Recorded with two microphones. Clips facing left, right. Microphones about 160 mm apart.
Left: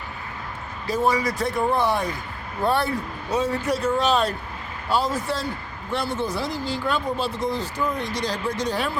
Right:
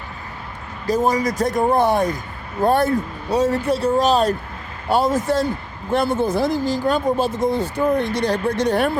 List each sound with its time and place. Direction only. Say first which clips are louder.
0.9 s speech: right 4 dB; 40° right (ahead or behind); by 8.9 s 60° right (ahead or behind)